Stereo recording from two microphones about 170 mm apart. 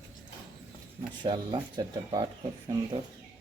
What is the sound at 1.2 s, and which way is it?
Speech, 25° right (ahead or behind).